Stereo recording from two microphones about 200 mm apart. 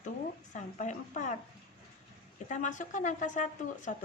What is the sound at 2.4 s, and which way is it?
Speech, 40° left (ahead or behind).